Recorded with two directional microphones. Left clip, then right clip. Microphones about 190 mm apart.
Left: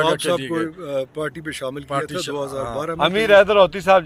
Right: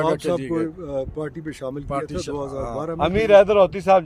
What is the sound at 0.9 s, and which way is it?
Speech, 20° right (ahead or behind).